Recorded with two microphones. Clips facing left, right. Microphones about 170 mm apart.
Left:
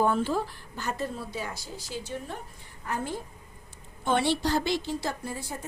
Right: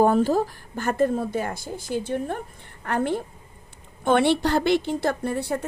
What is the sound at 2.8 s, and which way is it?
A woman's voice, 65° right (ahead or behind).